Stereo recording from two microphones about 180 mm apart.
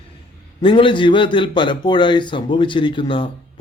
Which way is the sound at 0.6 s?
30° left (ahead or behind).